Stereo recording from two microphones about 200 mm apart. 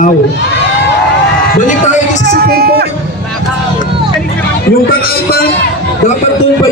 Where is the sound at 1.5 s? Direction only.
40° left (ahead or behind).